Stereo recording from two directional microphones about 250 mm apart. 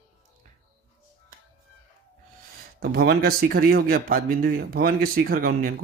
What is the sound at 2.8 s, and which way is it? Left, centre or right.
A man's voice, right.